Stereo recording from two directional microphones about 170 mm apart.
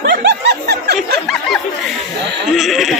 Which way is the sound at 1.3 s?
Centre (ahead or behind).